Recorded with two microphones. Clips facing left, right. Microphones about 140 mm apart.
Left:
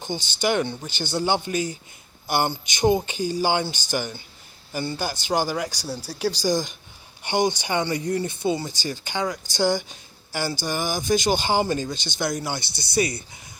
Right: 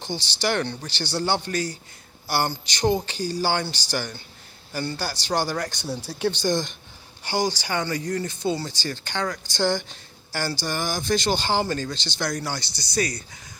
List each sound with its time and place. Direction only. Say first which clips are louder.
0.1 s speech: left 2 dB; 15° left (ahead or behind)
7.2 s speech: left 3 dB; 20° left (ahead or behind)
11.9 s speech: even; 50° left (ahead or behind)
12.4 s speech: left 1 dB; 20° left (ahead or behind)